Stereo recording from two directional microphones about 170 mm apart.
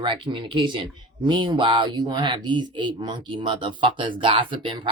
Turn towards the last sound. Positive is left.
turn(degrees=-30)  # may be behind; listen again after turning